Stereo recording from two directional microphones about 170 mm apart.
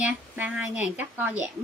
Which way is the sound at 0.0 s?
10° right (ahead or behind).